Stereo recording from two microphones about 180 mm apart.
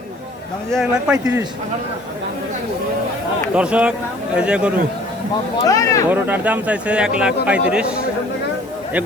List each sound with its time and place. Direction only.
0.7 s speech: 5° right (ahead or behind)
3.5 s speech: 5° right (ahead or behind)
5.6 s speech: 20° left (ahead or behind)
6.1 s speech: 10° right (ahead or behind)